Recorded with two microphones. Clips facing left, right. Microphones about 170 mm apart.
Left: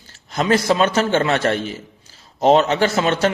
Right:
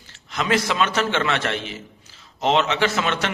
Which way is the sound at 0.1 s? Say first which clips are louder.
Left 4 dB; 40° left (ahead or behind).